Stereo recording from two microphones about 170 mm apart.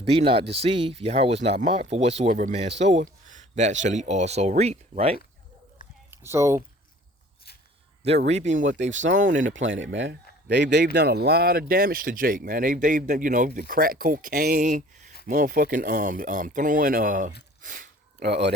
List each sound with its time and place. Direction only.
0.0 s speech: 35° right (ahead or behind)
6.1 s speech: 15° right (ahead or behind)
8.3 s speech: 40° right (ahead or behind)
9.5 s speech: 90° right; by 14.6 s 60° right (ahead or behind)
14.6 s speech: 45° right (ahead or behind)
17.6 s a sound: 50° right (ahead or behind)
18.2 s speech: 80° right